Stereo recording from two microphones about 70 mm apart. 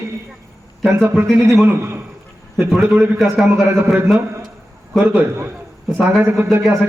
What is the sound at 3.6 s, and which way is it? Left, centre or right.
Speech, right.